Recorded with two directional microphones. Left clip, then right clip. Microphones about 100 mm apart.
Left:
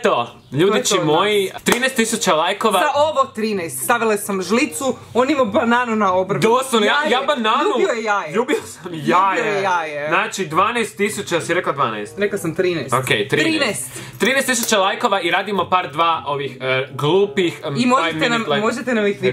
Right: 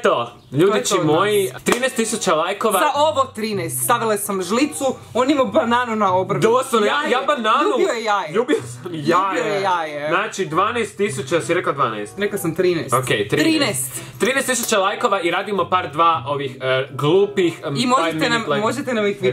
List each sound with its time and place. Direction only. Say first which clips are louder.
0.0 s speech: even; 5° left (ahead or behind)
2.8 s speech: right 1 dB; 15° right (ahead or behind)
6.4 s a man's voice: left 1 dB; 10° left (ahead or behind)
7.5 s speech: even; 10° right (ahead or behind)
9.0 s speech: left 2 dB; 15° left (ahead or behind)
9.3 s speech: left 1 dB; 15° right (ahead or behind)
10.1 s speech: left 2 dB; 15° left (ahead or behind)
12.2 s speech: left 1 dB; 15° right (ahead or behind)
12.9 s speech: left 1 dB; 5° left (ahead or behind)
13.4 s speech: even; 15° right (ahead or behind)
14.2 s a man's voice: left 2 dB; 5° left (ahead or behind)
17.7 s speech: left 2 dB; 15° right (ahead or behind)